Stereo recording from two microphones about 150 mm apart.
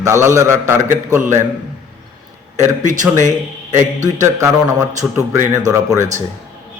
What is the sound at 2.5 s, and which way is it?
A man's voice, 55° right (ahead or behind).